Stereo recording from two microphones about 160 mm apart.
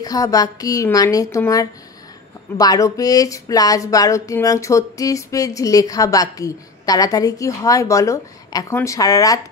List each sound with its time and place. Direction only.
0.0 s speech: 20° left (ahead or behind)